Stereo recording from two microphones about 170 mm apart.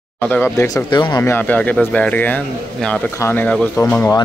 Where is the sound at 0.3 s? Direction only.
15° left (ahead or behind).